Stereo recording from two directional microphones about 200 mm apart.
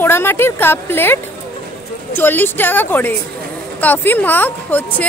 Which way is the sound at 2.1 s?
10° left (ahead or behind).